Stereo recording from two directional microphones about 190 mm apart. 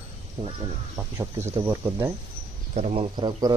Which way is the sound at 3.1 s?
25° right (ahead or behind).